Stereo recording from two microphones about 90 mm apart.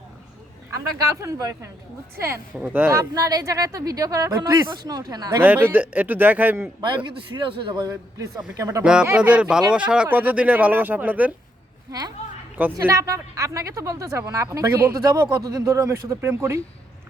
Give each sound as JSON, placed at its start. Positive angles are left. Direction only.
{"t": 1.1, "sound": "speech", "side_deg": -35}
{"t": 2.1, "sound": "speech", "side_deg": -30}
{"t": 2.6, "sound": "speech", "side_deg": -20}
{"t": 2.9, "sound": "speech", "side_deg": -40}
{"t": 5.4, "sound": "speech", "side_deg": -25}
{"t": 6.8, "sound": "speech", "side_deg": -60}
{"t": 8.5, "sound": "speech", "side_deg": -35}
{"t": 8.8, "sound": "speech", "side_deg": -10}
{"t": 11.9, "sound": "speech", "side_deg": -45}
{"t": 15.1, "sound": "speech", "side_deg": -45}